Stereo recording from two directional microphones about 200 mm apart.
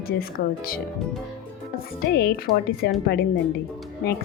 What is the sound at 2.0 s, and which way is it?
A woman's voice, 55° left (ahead or behind).